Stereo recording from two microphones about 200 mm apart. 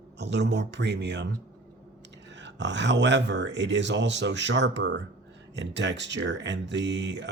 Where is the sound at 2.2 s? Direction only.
60° right (ahead or behind).